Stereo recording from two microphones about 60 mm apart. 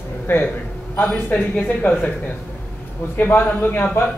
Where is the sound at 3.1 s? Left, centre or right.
Left.